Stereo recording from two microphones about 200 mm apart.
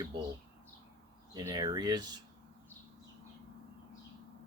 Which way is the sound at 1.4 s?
20° right (ahead or behind).